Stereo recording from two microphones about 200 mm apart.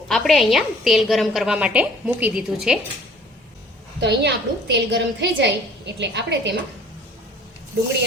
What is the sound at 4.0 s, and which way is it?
A woman's voice, 60° right (ahead or behind).